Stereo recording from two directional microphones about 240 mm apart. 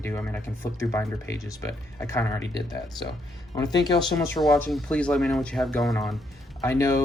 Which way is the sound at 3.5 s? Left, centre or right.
Centre.